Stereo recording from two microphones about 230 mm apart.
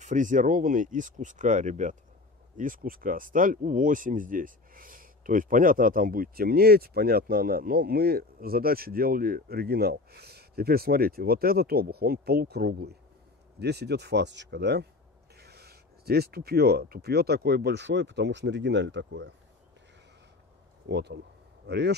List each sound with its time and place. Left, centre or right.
0.0 s speech: right
20.9 s speech: right